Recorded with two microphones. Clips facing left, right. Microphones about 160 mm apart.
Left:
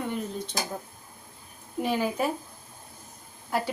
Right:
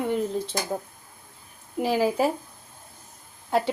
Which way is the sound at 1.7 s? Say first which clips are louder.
Right 4 dB; 30° right (ahead or behind).